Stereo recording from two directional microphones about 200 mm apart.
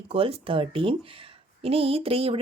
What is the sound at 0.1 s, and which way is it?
Speech, 30° right (ahead or behind).